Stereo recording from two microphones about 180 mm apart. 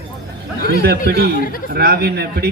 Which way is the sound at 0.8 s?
60° right (ahead or behind).